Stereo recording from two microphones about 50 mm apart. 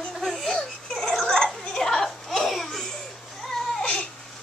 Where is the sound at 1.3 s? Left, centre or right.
Centre.